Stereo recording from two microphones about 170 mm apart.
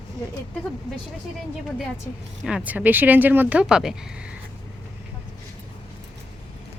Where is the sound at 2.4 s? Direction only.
5° right (ahead or behind).